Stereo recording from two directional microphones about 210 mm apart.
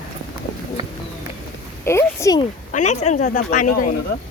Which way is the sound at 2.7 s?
35° left (ahead or behind).